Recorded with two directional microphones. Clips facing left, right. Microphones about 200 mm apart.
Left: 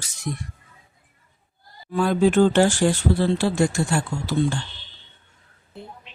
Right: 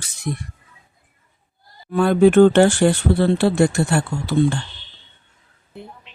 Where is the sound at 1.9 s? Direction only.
60° right (ahead or behind).